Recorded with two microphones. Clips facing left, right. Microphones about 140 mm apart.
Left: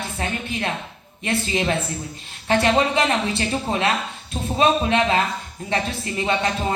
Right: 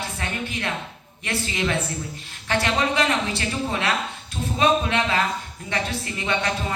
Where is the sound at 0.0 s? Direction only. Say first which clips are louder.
Left 2 dB; 25° left (ahead or behind).